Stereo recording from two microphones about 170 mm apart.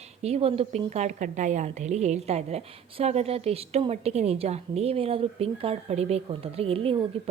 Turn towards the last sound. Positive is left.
turn(degrees=-35)  # may be behind; listen again after turning